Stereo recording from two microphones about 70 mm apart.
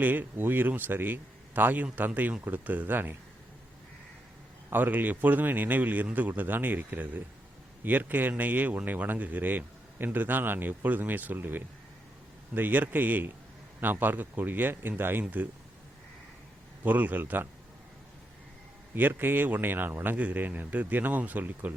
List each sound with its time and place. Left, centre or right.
0.0 s speech: right
4.7 s speech: right
16.8 s speech: right
18.9 s speech: right